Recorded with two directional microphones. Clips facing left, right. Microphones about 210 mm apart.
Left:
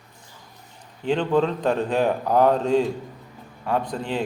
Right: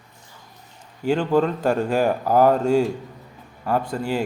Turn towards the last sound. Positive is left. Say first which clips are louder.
# right 2 dB
turn(degrees=-10)  # may be behind; listen again after turning